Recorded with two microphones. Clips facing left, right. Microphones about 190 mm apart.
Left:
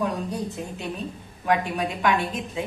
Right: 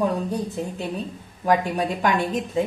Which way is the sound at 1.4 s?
35° right (ahead or behind).